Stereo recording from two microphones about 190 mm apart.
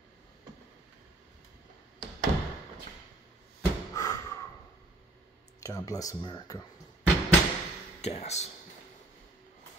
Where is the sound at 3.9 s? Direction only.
15° left (ahead or behind).